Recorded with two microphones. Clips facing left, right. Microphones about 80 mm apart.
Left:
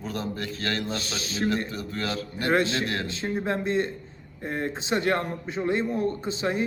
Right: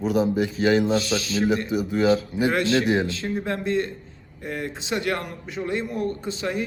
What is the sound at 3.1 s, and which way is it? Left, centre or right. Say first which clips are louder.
A man's voice: right 1 dB; left.